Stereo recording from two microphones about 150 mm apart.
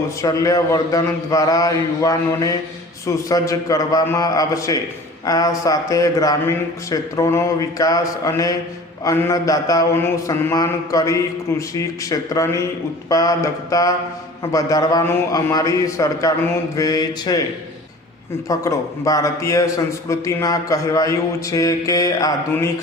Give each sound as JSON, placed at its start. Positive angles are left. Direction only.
{"t": 0.2, "sound": "a man's voice", "side_deg": 20}
{"t": 18.4, "sound": "a man's voice", "side_deg": 20}